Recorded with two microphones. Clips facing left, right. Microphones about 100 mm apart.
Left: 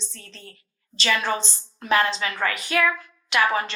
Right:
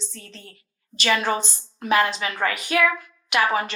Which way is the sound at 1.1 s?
25° right (ahead or behind).